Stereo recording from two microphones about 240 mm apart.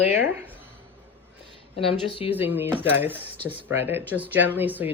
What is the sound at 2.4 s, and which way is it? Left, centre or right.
Speech, centre.